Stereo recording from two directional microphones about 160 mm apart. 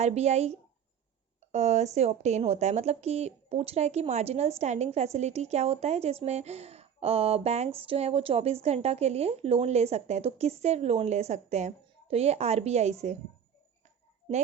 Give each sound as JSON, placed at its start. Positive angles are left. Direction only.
{"t": 0.0, "sound": "speech", "side_deg": -45}
{"t": 1.5, "sound": "a woman's voice", "side_deg": -45}